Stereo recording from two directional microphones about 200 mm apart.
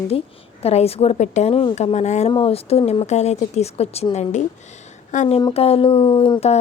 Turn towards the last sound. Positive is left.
turn(degrees=25)  # may be behind; listen again after turning